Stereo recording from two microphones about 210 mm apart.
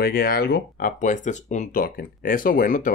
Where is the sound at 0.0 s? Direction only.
45° left (ahead or behind).